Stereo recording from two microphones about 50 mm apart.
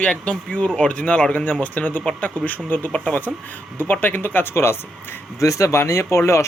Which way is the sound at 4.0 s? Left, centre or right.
Left.